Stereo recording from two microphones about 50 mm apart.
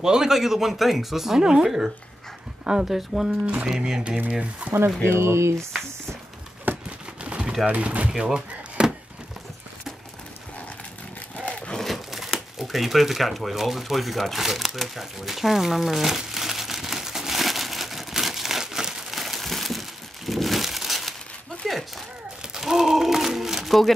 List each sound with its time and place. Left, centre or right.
0.0 s speech: centre
4.3 s speech: right
5.1 s speech: right
6.7 s crumpling: right
7.2 s a sound: right
7.6 s speech: right
8.2 s slam: centre
11.5 s a sound: left
11.8 s crumpling: centre
21.6 s a sound: centre